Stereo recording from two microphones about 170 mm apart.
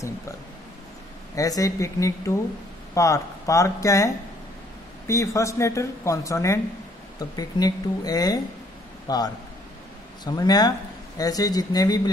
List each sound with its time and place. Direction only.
1.3 s a man's voice: 20° left (ahead or behind)